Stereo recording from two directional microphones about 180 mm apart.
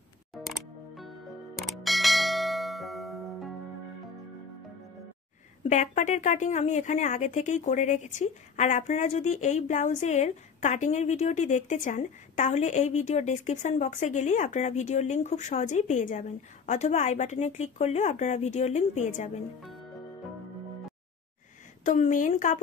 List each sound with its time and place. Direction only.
0.3 s music: centre (ahead or behind)
5.6 s speech: 40° left (ahead or behind)
21.8 s a woman's voice: 40° left (ahead or behind)